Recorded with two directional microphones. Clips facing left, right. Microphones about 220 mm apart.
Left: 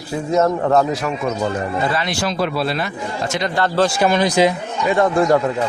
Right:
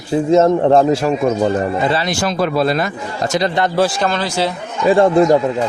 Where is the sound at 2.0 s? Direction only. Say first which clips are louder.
Right 3 dB; 45° right (ahead or behind).